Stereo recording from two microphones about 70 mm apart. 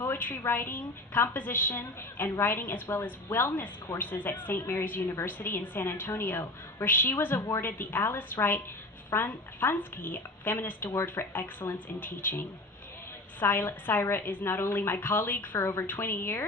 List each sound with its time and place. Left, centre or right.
0.0 s a woman's voice: left
15.5 s a woman's voice: left